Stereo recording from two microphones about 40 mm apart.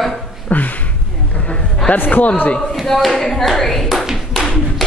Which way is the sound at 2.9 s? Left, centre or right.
Centre.